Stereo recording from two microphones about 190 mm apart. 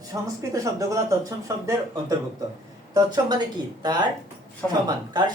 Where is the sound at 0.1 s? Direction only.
20° right (ahead or behind).